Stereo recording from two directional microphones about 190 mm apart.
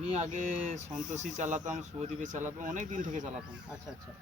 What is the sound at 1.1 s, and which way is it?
Speech, 40° right (ahead or behind).